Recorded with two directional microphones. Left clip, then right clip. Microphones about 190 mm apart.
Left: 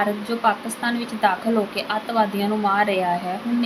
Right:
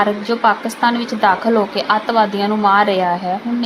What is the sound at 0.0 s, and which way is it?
A woman's voice, 10° right (ahead or behind).